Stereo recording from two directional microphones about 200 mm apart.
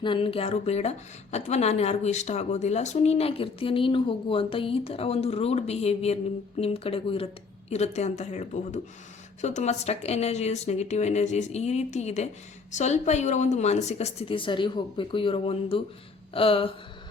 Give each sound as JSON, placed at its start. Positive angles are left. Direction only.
{"t": 0.0, "sound": "speech", "side_deg": 25}